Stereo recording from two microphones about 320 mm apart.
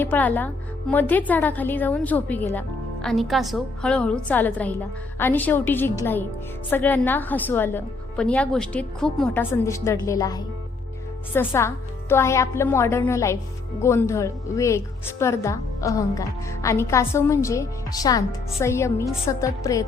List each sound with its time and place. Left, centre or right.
0.0 s a woman's voice: centre